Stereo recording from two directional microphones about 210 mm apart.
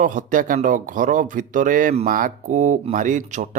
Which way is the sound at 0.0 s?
40° right (ahead or behind).